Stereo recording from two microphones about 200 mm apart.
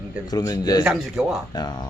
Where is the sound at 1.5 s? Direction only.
20° left (ahead or behind).